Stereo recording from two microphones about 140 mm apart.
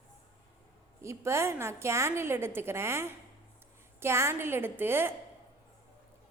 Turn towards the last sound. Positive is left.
turn(degrees=-15)  # may be behind; listen again after turning